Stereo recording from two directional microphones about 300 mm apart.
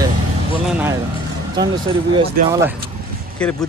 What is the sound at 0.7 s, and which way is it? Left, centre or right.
Vehicle, centre.